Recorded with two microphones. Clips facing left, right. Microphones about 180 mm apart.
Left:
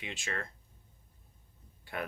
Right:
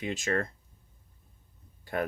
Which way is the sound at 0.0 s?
40° right (ahead or behind).